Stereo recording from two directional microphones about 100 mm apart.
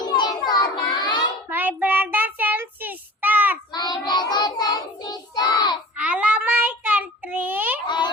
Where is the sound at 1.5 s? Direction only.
15° right (ahead or behind).